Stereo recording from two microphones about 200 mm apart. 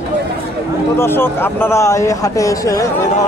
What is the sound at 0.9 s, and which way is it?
A man's voice, 10° left (ahead or behind).